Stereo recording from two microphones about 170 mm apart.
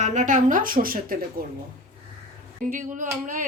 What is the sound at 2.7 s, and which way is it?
Speech, 50° right (ahead or behind).